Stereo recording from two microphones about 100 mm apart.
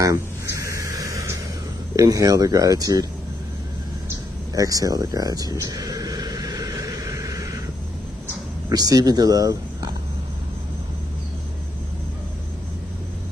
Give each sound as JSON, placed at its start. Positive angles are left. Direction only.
{"t": 0.0, "sound": "a sound", "side_deg": -35}
{"t": 2.0, "sound": "speech", "side_deg": -35}
{"t": 4.6, "sound": "speech", "side_deg": -35}
{"t": 6.4, "sound": "vehicle", "side_deg": -35}
{"t": 8.6, "sound": "speech", "side_deg": -40}